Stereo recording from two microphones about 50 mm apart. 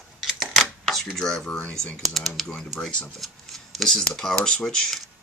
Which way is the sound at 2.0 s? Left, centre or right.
Centre.